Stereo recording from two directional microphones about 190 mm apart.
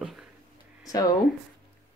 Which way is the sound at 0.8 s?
20° left (ahead or behind).